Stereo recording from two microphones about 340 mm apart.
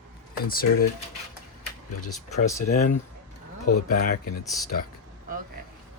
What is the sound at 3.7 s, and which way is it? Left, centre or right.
Speech, left.